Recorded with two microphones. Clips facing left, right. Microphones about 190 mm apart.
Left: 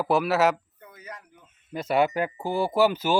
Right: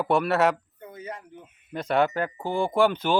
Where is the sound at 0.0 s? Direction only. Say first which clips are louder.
Even; centre (ahead or behind).